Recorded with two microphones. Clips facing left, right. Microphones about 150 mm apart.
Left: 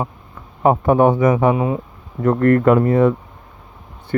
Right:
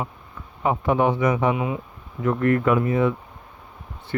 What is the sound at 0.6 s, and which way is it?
Speech, 45° left (ahead or behind).